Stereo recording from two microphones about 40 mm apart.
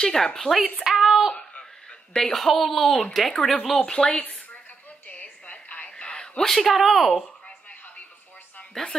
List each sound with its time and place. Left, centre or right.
0.0 s speech: centre
0.8 s child singing: centre
1.6 s a sound: centre
2.3 s speech: centre
3.7 s speech: left
4.2 s a sound: left
5.1 s music: left
5.9 s a sound: left
6.4 s speech: centre